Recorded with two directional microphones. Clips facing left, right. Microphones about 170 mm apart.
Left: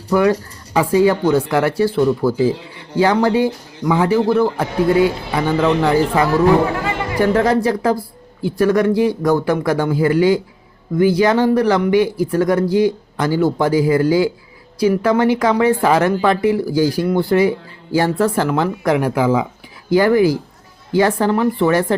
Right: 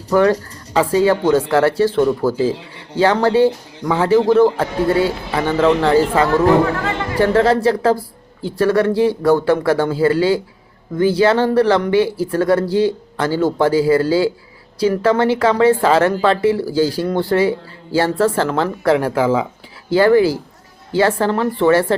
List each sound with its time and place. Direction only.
0.1 s speech: 15° left (ahead or behind)